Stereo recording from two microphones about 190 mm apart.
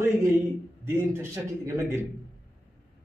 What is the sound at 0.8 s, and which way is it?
A man's voice, 10° right (ahead or behind).